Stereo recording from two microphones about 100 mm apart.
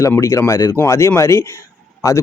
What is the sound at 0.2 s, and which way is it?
Speech, 30° left (ahead or behind).